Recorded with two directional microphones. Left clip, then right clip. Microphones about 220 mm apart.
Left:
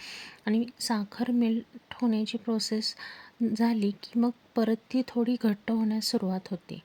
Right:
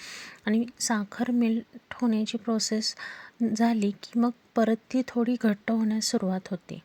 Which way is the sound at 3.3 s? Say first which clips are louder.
Right 1 dB; centre (ahead or behind).